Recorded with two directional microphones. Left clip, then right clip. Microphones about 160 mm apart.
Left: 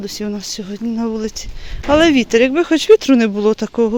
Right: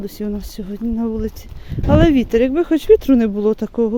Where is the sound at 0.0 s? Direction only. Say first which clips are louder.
Left 2 dB; 20° right (ahead or behind).